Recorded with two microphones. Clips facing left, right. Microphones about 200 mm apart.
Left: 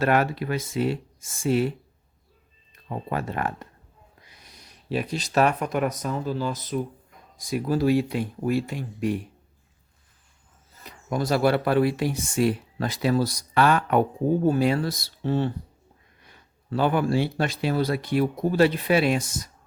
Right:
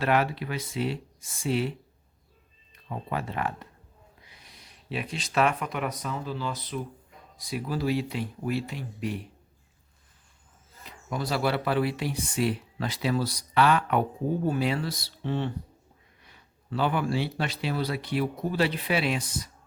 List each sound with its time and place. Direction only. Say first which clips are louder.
0.0 s speech: left 3 dB; 45° left (ahead or behind)
3.1 s speech: left 3 dB; 50° left (ahead or behind)
10.8 s speech: left 6 dB; 45° left (ahead or behind)